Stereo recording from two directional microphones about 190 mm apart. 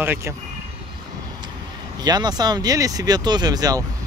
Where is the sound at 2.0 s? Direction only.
20° right (ahead or behind).